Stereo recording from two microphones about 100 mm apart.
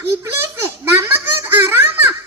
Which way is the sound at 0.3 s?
25° right (ahead or behind).